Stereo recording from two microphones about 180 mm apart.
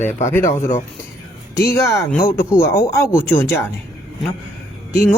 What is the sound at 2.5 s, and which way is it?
Speech, 15° left (ahead or behind).